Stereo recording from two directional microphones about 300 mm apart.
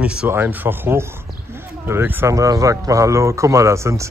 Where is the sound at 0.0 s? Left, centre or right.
Centre.